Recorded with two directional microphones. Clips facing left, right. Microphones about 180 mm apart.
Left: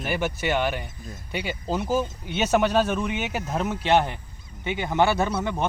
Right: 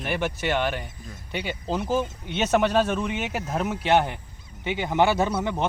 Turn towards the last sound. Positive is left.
turn(degrees=-15)  # may be behind; listen again after turning